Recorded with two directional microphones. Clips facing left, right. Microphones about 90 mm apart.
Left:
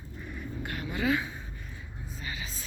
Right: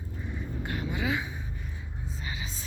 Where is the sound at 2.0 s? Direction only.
25° right (ahead or behind).